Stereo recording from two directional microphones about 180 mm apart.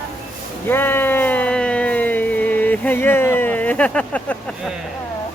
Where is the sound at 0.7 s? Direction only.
10° left (ahead or behind).